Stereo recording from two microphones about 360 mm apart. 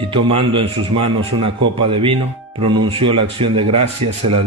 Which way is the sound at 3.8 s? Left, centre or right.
Right.